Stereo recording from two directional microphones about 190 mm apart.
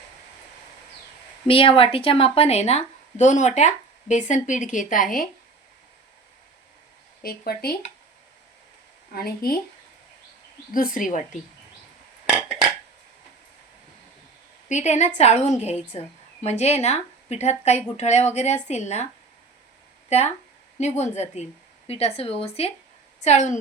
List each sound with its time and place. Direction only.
1.5 s a woman's voice: 30° left (ahead or behind)
7.2 s speech: 55° left (ahead or behind)
9.1 s speech: 55° left (ahead or behind)
10.8 s speech: 45° left (ahead or behind)
14.7 s a woman's voice: 40° left (ahead or behind)
20.1 s a woman's voice: 35° left (ahead or behind)